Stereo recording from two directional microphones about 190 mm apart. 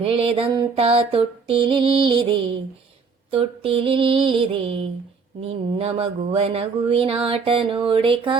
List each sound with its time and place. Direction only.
0.0 s speech: 30° right (ahead or behind)